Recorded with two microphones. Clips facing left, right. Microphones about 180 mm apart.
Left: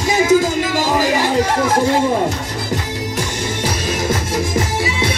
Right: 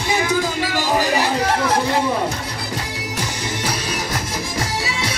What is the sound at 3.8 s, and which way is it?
Music, 45° left (ahead or behind).